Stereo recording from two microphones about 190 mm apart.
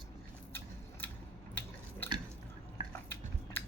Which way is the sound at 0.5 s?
10° left (ahead or behind).